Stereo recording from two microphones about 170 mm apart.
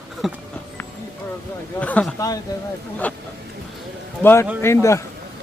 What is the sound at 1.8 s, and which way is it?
Speech, 10° left (ahead or behind).